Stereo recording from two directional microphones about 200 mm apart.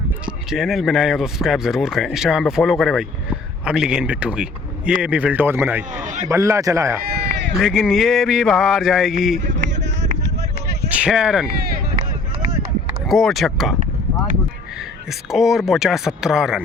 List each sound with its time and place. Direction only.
0.5 s a man's voice: centre (ahead or behind)
5.9 s a sound: 40° right (ahead or behind)
6.2 s a man's voice: 15° right (ahead or behind)
7.0 s sheep: 50° right (ahead or behind)
7.5 s speech: centre (ahead or behind)
9.4 s a sound: 60° right (ahead or behind)
10.8 s speech: 5° right (ahead or behind)
11.4 s speech: 50° right (ahead or behind)
13.1 s speech: centre (ahead or behind)
15.3 s speech: centre (ahead or behind)